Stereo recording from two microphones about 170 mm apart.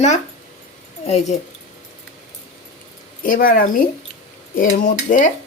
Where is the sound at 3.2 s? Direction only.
55° left (ahead or behind).